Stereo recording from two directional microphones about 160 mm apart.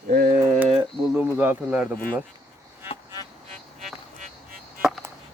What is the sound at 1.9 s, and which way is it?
Speech, 10° left (ahead or behind).